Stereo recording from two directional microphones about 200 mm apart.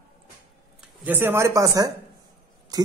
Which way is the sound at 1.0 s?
10° right (ahead or behind).